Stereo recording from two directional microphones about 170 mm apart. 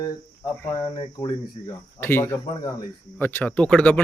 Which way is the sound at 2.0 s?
15° left (ahead or behind).